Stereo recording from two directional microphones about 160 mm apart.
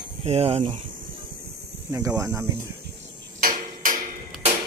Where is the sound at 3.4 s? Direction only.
60° right (ahead or behind).